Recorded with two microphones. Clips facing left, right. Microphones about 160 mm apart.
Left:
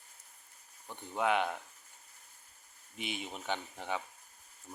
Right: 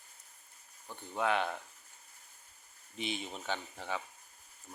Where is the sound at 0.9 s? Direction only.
15° left (ahead or behind).